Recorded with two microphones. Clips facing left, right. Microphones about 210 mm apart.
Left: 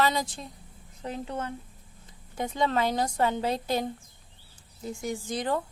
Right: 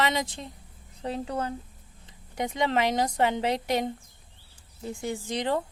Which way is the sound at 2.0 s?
20° right (ahead or behind).